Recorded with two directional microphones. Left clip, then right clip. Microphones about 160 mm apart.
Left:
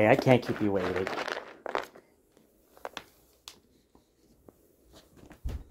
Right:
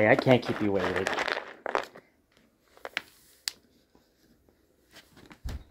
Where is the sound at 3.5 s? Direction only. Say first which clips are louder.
Right 13 dB; 65° right (ahead or behind).